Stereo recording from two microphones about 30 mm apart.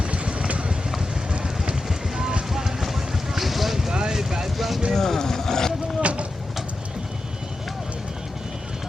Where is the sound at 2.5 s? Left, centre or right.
Centre.